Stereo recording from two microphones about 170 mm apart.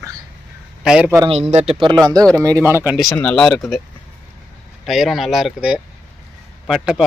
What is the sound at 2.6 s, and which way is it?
Speech, 15° right (ahead or behind).